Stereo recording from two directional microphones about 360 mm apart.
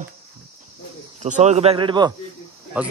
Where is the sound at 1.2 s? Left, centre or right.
Centre.